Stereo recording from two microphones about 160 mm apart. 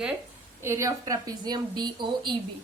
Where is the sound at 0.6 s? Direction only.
15° right (ahead or behind).